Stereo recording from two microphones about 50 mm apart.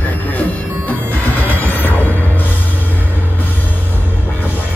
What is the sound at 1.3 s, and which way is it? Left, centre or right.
Music, left.